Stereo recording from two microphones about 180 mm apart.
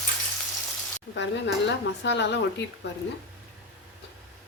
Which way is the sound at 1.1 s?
75° left (ahead or behind).